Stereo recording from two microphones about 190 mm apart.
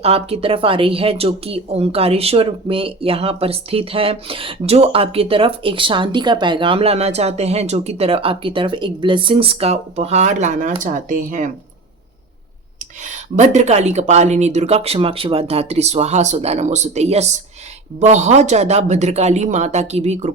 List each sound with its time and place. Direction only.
0.0 s speech: 30° right (ahead or behind)
13.0 s speech: 40° right (ahead or behind)